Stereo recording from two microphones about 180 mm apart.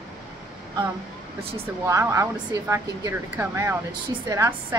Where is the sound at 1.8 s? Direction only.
15° right (ahead or behind).